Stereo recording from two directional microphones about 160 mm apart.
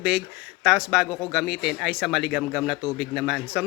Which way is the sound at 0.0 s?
5° right (ahead or behind).